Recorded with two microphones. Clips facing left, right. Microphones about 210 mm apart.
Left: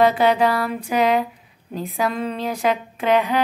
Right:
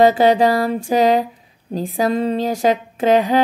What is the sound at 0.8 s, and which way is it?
Speech, 30° right (ahead or behind).